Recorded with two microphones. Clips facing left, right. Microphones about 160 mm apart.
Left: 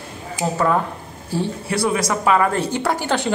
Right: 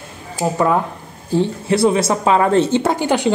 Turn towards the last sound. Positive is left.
turn(degrees=-15)  # may be behind; listen again after turning